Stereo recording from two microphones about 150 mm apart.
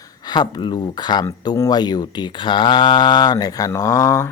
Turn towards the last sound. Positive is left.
turn(degrees=20)  # may be behind; listen again after turning